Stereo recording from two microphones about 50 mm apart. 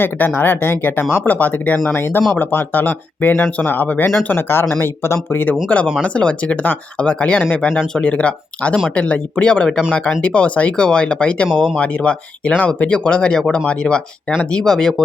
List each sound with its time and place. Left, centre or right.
0.0 s speech: left
1.9 s speech: left
4.3 s speech: left
4.8 s speech: left
5.6 s speech: left